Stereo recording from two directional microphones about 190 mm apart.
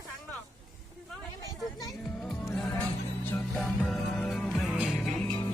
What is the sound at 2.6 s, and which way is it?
Music, 5° left (ahead or behind).